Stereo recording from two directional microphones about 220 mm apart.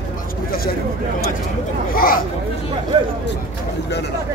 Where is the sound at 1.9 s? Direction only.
40° left (ahead or behind).